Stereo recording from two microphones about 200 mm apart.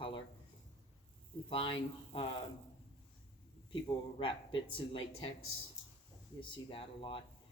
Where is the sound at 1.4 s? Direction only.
25° left (ahead or behind).